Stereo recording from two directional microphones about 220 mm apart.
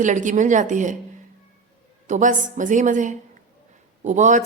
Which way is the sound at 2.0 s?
35° right (ahead or behind).